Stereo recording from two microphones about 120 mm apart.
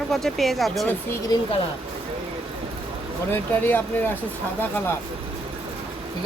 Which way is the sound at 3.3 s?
15° left (ahead or behind).